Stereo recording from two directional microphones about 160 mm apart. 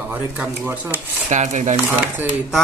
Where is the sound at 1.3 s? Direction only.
50° right (ahead or behind).